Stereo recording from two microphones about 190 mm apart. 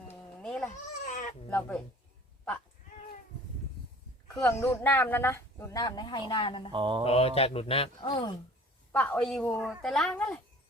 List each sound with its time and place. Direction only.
0.4 s a sound: 5° left (ahead or behind)
1.0 s a sound: 40° left (ahead or behind)
1.5 s speech: 10° left (ahead or behind)
4.4 s speech: 10° left (ahead or behind); by 6.7 s 25° left (ahead or behind)
6.7 s mantra: 25° right (ahead or behind)
7.0 s speech: 30° left (ahead or behind)
8.9 s a child's voice: 10° left (ahead or behind)